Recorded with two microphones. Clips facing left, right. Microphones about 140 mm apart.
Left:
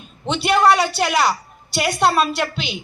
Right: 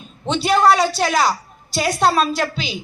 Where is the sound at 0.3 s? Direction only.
Centre (ahead or behind).